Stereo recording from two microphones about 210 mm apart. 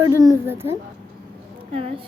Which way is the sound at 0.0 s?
15° right (ahead or behind).